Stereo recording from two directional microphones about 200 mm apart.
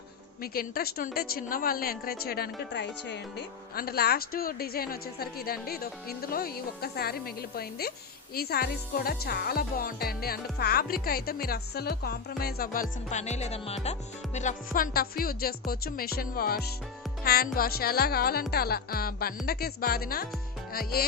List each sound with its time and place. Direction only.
0.4 s a woman's voice: 45° left (ahead or behind)